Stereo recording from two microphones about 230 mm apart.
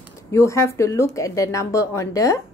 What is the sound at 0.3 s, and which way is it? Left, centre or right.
A woman's voice, centre.